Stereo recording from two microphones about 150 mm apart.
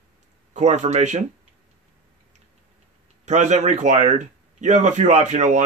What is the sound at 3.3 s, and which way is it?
Speech, 50° right (ahead or behind).